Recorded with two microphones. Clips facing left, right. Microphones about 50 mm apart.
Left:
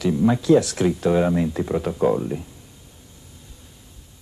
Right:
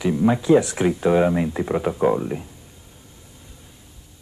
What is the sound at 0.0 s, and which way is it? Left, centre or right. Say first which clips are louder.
Speech: even; centre.